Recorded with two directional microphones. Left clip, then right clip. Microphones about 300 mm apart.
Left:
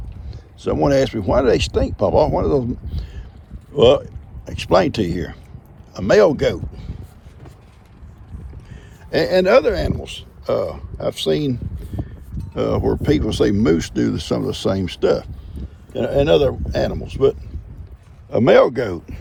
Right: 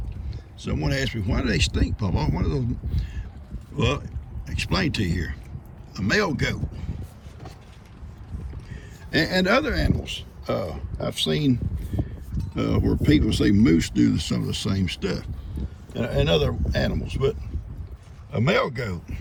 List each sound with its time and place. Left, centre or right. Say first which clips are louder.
0.9 s speech: left 11 dB; centre
8.7 s speech: left 4 dB; centre
18.9 s speech: left 9 dB; centre